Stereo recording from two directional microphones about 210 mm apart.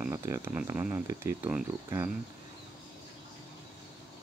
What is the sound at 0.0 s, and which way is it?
Speech, 15° right (ahead or behind).